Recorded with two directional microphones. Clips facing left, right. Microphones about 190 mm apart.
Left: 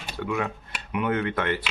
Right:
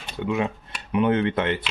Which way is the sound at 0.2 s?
20° right (ahead or behind).